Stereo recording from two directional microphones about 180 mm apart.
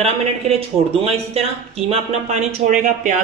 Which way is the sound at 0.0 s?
35° right (ahead or behind).